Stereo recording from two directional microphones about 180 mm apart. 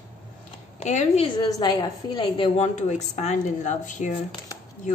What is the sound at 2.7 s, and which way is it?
A woman's voice, 40° left (ahead or behind).